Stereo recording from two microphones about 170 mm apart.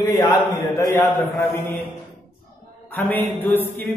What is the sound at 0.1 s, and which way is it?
Speech, 20° left (ahead or behind).